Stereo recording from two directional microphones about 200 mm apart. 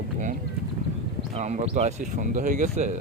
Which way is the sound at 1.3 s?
35° right (ahead or behind).